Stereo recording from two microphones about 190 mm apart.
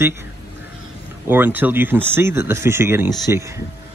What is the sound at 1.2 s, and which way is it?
Speech, 10° right (ahead or behind).